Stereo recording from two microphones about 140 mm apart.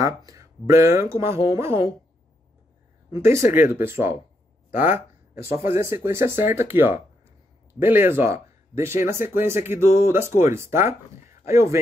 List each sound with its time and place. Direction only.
0.0 s speech: 25° right (ahead or behind)
3.1 s speech: 20° right (ahead or behind)
4.6 s a sound: 15° right (ahead or behind)
5.8 s speech: 15° right (ahead or behind)